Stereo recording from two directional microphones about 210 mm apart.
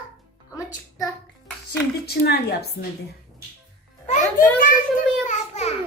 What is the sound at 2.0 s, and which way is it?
Speech, 50° left (ahead or behind).